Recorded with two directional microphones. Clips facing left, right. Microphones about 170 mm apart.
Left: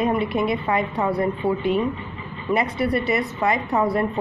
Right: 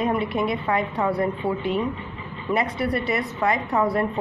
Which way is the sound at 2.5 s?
15° left (ahead or behind).